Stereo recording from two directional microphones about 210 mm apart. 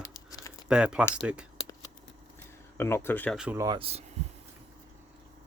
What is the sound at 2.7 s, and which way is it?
Speech, 10° left (ahead or behind).